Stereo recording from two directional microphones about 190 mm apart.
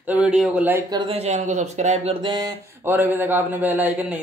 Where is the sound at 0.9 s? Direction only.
30° right (ahead or behind).